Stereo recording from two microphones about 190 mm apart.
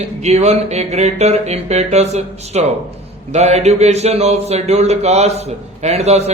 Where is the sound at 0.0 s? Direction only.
35° right (ahead or behind).